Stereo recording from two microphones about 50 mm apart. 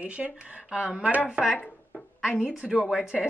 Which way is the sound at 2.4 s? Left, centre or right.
Centre.